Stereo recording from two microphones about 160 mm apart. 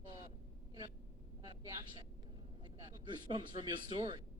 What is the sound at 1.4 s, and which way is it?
A woman's voice, 30° right (ahead or behind).